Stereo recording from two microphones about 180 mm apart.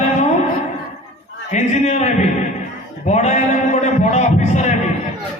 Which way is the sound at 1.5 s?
40° left (ahead or behind).